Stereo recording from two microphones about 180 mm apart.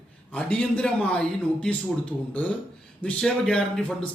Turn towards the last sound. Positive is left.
turn(degrees=5)  # may be behind; listen again after turning